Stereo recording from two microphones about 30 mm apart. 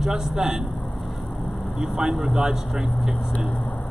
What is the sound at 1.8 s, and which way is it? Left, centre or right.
A man's voice, centre.